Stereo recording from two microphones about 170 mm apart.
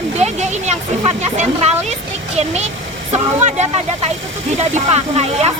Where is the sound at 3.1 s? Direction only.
40° right (ahead or behind).